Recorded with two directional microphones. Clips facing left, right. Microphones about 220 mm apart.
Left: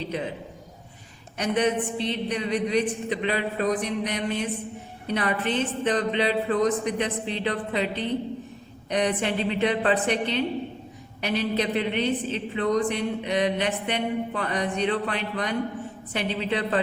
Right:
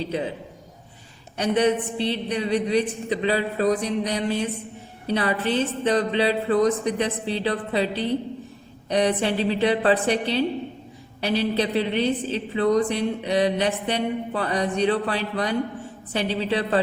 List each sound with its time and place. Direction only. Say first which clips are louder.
0.0 s a woman's voice: right 3 dB; 30° right (ahead or behind)
1.4 s a woman's voice: right 3 dB; 30° right (ahead or behind)